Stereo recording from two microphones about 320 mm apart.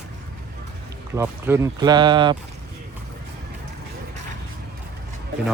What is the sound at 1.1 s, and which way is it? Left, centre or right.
Speech, centre.